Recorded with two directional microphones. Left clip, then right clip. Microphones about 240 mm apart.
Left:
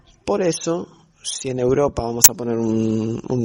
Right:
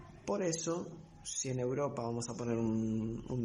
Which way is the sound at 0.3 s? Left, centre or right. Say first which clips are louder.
Left 15 dB; left.